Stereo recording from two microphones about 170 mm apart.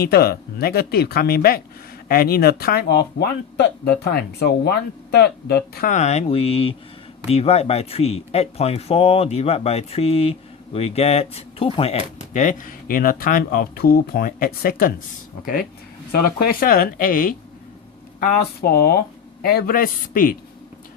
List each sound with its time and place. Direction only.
0.0 s speech: 65° left (ahead or behind)
3.8 s speech: 65° left (ahead or behind)
5.9 s speech: 40° left (ahead or behind)
12.3 s speech: 45° left (ahead or behind)
16.4 s speech: 55° left (ahead or behind)